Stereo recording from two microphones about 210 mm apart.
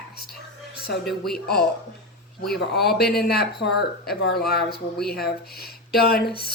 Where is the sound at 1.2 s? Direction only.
50° left (ahead or behind).